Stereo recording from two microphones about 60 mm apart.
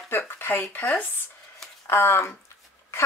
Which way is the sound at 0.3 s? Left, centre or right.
Left.